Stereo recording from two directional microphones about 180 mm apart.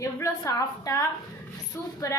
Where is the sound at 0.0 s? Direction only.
15° left (ahead or behind).